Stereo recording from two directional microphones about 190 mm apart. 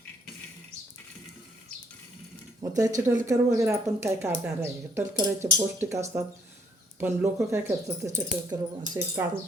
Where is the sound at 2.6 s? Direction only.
20° right (ahead or behind).